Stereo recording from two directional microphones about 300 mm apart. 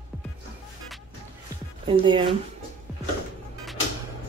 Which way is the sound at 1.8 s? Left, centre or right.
Centre.